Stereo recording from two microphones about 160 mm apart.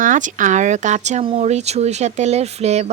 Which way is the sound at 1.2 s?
35° right (ahead or behind).